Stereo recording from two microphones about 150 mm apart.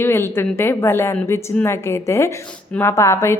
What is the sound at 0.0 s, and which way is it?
A woman's voice, 15° left (ahead or behind).